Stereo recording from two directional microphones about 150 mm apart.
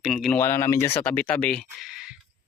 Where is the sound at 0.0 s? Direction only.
Centre (ahead or behind).